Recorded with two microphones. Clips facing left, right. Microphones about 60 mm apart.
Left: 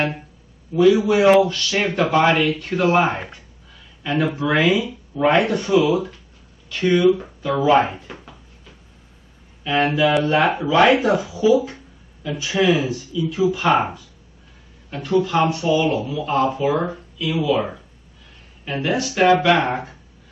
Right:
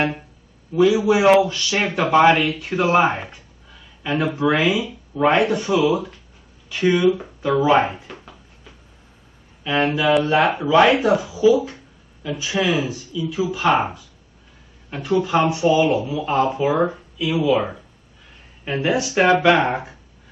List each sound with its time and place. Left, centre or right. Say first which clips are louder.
0.7 s a man's voice: left 1 dB; centre
6.7 s a man's voice: left 1 dB; centre
7.6 s speech: left 2 dB; right
9.6 s a sound: left 1 dB; centre
9.9 s speech: right 1 dB; centre
15.0 s a man's voice: even; centre
18.7 s a man's voice: right 1 dB; centre